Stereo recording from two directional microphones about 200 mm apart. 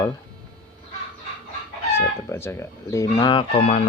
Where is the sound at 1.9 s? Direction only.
10° left (ahead or behind).